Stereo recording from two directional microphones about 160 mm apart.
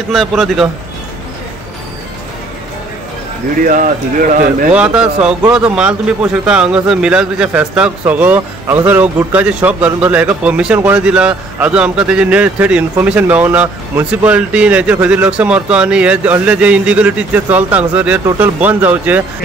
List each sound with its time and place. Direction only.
0.1 s speech: centre (ahead or behind)
3.6 s speech: 60° right (ahead or behind)
4.7 s a man's voice: 5° right (ahead or behind)